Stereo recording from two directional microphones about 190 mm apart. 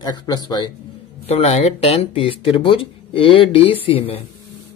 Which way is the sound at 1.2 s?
35° left (ahead or behind).